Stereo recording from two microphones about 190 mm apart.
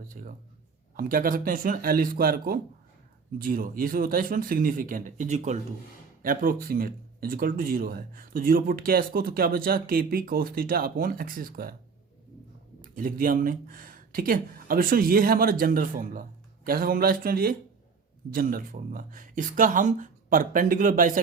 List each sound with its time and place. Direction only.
0.1 s speech: 45° right (ahead or behind)
12.8 s speech: 50° right (ahead or behind)